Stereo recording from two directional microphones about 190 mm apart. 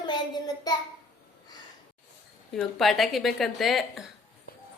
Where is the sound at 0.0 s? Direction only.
20° left (ahead or behind).